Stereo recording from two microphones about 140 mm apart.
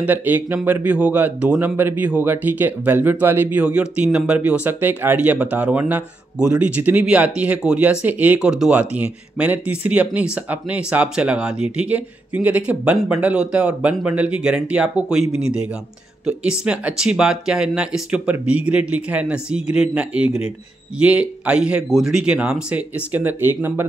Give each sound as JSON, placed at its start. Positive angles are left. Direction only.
{"t": 0.0, "sound": "speech", "side_deg": -10}